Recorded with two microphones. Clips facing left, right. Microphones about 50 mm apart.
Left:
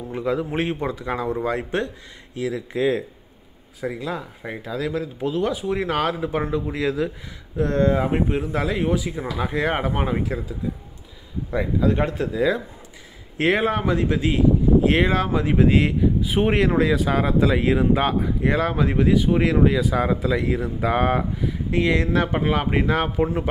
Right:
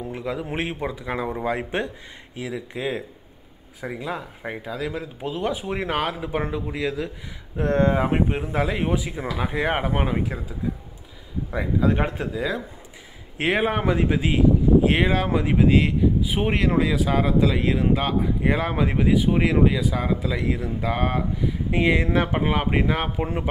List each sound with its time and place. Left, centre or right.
0.1 s a man's voice: centre; by 5.9 s right
5.9 s speech: centre
7.5 s speech: right; by 10.4 s centre
11.5 s speech: centre
12.4 s speech: centre
18.4 s speech: centre
21.6 s speech: centre